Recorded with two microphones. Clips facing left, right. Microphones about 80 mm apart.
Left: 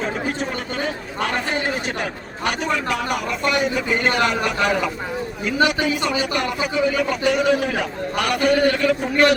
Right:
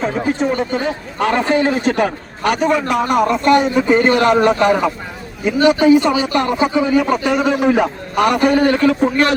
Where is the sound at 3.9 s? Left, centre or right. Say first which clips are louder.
Right 10 dB; right.